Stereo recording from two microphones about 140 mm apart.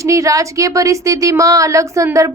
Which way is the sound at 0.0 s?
20° right (ahead or behind).